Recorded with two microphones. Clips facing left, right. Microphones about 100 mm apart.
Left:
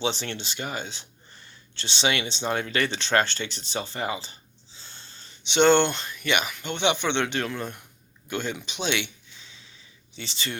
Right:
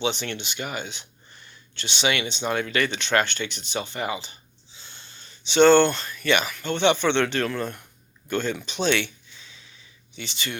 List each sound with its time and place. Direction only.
0.0 s speech: 35° left (ahead or behind)